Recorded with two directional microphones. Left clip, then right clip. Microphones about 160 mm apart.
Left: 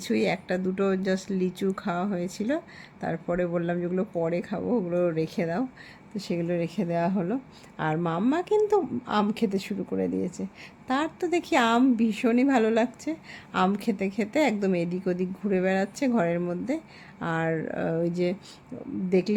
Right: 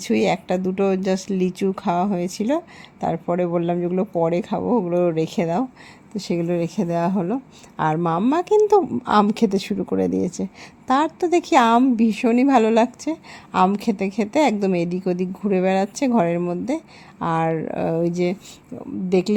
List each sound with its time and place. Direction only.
0.0 s a woman's voice: 30° right (ahead or behind)